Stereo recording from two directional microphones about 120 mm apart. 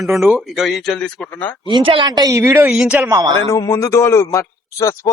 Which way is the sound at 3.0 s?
30° right (ahead or behind).